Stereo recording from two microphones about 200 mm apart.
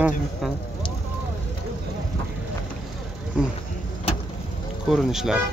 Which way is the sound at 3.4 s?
5° right (ahead or behind).